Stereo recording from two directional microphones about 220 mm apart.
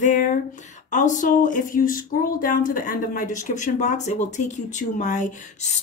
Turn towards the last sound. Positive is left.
turn(degrees=35)  # may be behind; listen again after turning